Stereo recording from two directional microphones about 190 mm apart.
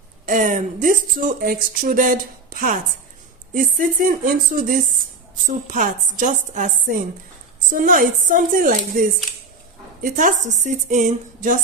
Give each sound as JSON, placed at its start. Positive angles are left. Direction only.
{"t": 0.3, "sound": "speech", "side_deg": -45}